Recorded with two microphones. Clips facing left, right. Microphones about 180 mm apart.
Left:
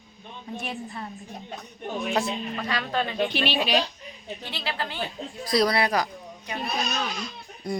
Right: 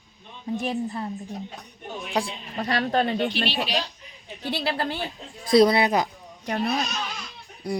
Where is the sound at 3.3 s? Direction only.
55° left (ahead or behind).